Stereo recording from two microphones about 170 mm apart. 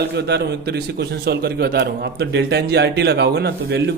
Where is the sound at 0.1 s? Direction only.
80° right.